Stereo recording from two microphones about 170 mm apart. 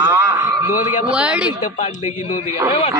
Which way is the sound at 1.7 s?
50° left (ahead or behind).